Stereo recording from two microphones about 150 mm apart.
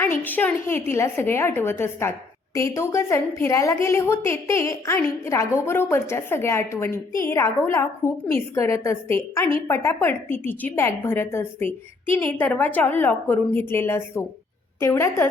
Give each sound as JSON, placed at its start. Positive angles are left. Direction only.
{"t": 0.0, "sound": "a woman's voice", "side_deg": 10}